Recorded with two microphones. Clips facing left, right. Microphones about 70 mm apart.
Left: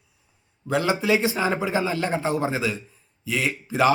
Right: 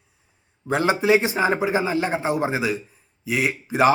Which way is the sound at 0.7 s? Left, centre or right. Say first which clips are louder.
Right 3 dB; right.